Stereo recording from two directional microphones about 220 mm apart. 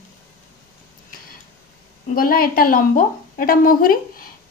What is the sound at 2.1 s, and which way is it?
A woman's voice, 40° left (ahead or behind).